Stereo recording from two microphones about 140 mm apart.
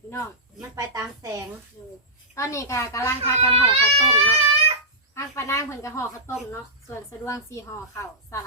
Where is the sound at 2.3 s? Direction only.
20° left (ahead or behind).